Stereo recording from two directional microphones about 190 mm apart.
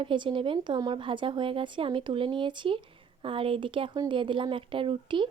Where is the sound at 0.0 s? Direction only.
25° right (ahead or behind).